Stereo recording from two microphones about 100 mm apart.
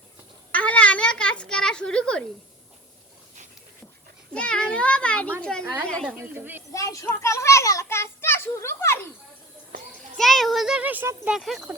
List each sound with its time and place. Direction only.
0.5 s a child's voice: 15° left (ahead or behind)
4.4 s a child's voice: 10° left (ahead or behind)
6.1 s speech: 20° right (ahead or behind)
6.7 s a sound: 35° left (ahead or behind)
10.2 s a child's voice: 5° left (ahead or behind)
10.8 s speech: 20° right (ahead or behind)
11.3 s a child's voice: 5° right (ahead or behind)